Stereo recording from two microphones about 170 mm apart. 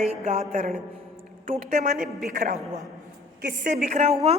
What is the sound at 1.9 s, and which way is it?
Speech, 65° right (ahead or behind).